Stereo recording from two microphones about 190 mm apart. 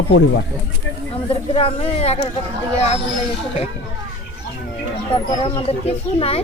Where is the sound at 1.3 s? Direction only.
30° left (ahead or behind).